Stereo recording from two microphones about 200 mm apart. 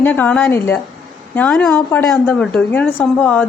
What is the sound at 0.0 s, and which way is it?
A woman's voice, 10° left (ahead or behind).